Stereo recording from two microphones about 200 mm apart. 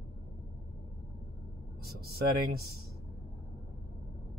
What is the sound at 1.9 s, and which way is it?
Speech, 50° right (ahead or behind).